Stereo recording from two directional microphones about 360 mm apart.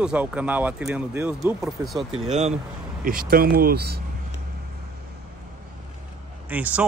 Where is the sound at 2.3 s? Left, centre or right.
Centre.